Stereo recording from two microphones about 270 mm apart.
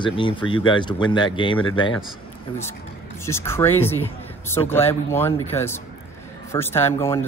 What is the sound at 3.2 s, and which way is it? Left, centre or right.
Speech, centre.